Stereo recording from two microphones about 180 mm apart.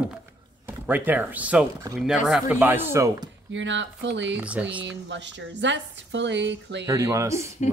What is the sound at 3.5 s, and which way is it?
Speech, 90° right.